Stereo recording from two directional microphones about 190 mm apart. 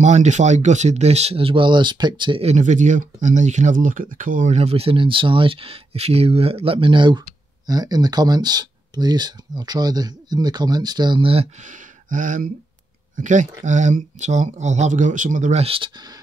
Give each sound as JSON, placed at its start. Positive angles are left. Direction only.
{"t": 0.0, "sound": "speech", "side_deg": -40}
{"t": 11.6, "sound": "speech", "side_deg": -45}